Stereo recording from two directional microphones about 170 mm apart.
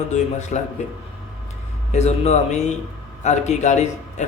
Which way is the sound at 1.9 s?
40° left (ahead or behind).